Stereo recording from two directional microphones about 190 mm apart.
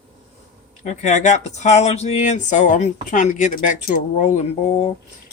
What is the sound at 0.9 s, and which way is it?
Speech, 40° left (ahead or behind).